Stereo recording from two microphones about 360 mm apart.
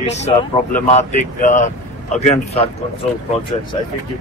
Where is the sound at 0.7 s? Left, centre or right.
Left.